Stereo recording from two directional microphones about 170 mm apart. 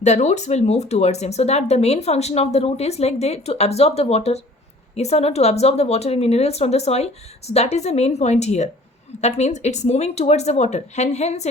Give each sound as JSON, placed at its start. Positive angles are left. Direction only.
{"t": 0.0, "sound": "speech", "side_deg": 40}